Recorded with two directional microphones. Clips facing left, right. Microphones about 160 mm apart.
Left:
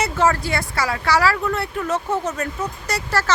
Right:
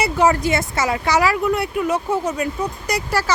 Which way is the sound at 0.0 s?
15° right (ahead or behind).